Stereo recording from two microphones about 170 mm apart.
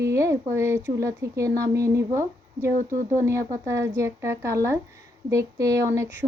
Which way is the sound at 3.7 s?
15° right (ahead or behind).